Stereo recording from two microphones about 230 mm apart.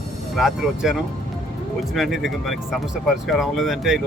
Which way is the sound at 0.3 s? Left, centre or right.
Centre.